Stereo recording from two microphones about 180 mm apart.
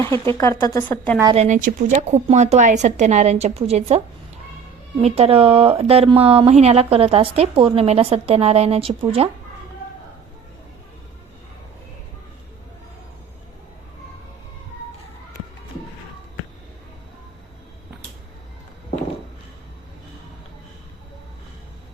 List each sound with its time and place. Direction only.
0.3 s a woman's voice: 15° left (ahead or behind)
1.4 s speech: 45° right (ahead or behind)